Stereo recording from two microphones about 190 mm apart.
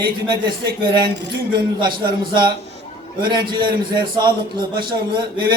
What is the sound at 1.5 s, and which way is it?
A man's voice, 25° right (ahead or behind).